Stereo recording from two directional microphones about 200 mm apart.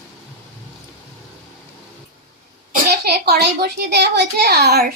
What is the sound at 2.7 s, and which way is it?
A child's voice, 55° right (ahead or behind).